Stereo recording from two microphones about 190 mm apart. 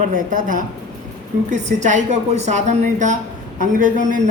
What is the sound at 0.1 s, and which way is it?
A man's voice, 45° right (ahead or behind).